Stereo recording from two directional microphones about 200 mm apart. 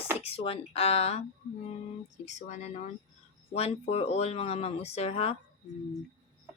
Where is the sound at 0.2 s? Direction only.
30° left (ahead or behind).